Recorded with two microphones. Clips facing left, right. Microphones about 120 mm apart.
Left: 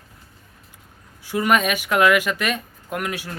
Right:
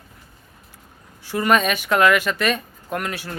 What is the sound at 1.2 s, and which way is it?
Speech, 10° left (ahead or behind).